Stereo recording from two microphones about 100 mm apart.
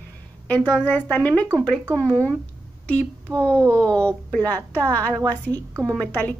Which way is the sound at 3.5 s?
30° right (ahead or behind).